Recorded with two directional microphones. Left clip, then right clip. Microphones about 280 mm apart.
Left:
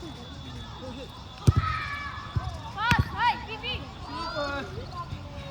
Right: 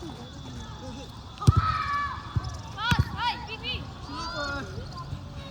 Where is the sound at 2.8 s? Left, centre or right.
Left.